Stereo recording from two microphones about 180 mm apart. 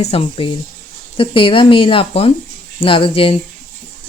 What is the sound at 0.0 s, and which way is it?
Speech, 35° left (ahead or behind).